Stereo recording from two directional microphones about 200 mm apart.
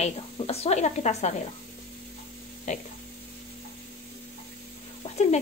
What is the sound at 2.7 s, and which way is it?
Speech, 35° left (ahead or behind).